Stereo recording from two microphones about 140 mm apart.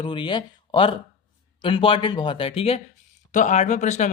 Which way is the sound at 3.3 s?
60° left (ahead or behind).